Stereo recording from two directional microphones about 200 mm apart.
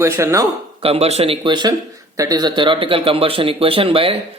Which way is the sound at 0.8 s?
30° right (ahead or behind).